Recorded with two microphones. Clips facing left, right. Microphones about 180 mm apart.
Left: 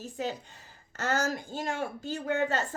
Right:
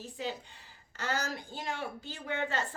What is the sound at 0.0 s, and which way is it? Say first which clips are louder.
A woman's voice: left 4 dB; 45° left (ahead or behind).